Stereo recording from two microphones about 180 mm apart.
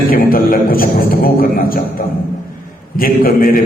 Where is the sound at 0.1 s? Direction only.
55° left (ahead or behind).